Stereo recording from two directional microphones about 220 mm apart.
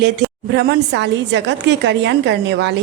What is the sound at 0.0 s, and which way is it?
A woman's voice, 50° right (ahead or behind).